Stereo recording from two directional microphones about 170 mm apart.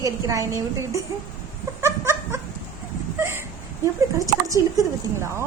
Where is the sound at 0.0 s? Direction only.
20° right (ahead or behind).